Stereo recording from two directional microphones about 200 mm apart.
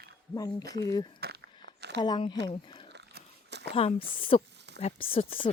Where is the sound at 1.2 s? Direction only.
55° right (ahead or behind).